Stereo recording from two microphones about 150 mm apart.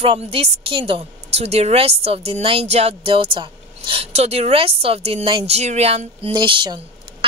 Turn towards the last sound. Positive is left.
turn(degrees=-35)  # may be behind; listen again after turning